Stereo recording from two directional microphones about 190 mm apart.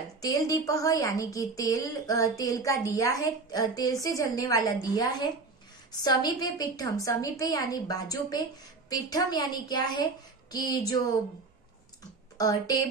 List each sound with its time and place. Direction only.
0.2 s a woman's voice: 20° left (ahead or behind)
12.4 s a woman's voice: 20° left (ahead or behind)